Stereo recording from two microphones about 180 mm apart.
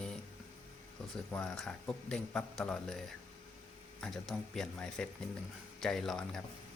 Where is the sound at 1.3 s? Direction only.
5° left (ahead or behind).